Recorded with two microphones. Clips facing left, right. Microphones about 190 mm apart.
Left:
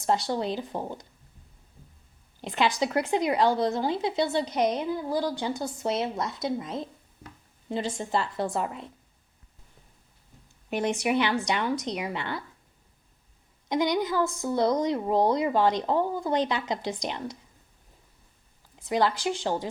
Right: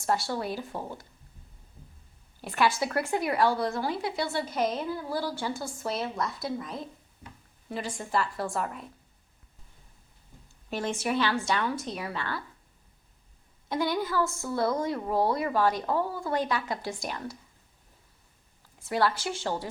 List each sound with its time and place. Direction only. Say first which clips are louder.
0.0 s a woman's voice: left 3 dB; 20° left (ahead or behind)
2.4 s a woman's voice: left 1 dB; 20° left (ahead or behind)
10.7 s a woman's voice: left 4 dB; 20° left (ahead or behind)
13.7 s a woman's voice: left 3 dB; 20° left (ahead or behind)
18.8 s a woman's voice: left 2 dB; 15° left (ahead or behind)